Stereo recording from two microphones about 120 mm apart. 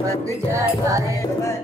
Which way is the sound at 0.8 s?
25° right (ahead or behind).